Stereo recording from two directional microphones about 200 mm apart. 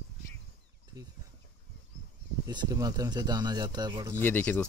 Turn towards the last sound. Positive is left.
turn(degrees=10)  # may be behind; listen again after turning